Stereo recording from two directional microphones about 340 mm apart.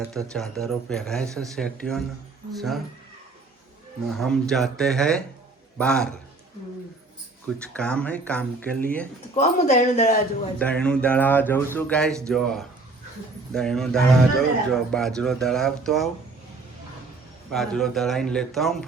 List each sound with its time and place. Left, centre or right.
0.0 s a man's voice: centre
4.1 s a man's voice: centre
7.6 s a man's voice: centre
9.3 s speech: centre
10.6 s a man's voice: centre
17.5 s a man's voice: centre